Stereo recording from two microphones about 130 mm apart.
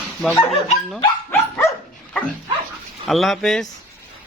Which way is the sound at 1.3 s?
20° left (ahead or behind).